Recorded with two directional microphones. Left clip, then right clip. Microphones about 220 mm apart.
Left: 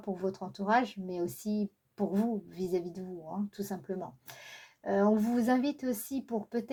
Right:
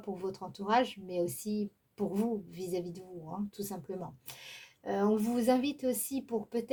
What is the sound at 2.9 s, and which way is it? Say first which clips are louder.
Speech: left 3 dB; 25° left (ahead or behind).